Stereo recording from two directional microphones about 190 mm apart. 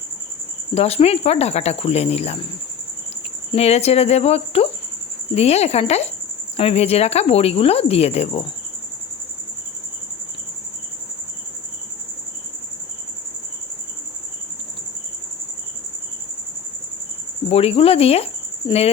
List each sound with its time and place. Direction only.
0.7 s speech: 30° left (ahead or behind)
3.5 s speech: 35° left (ahead or behind)
17.5 s speech: 30° left (ahead or behind)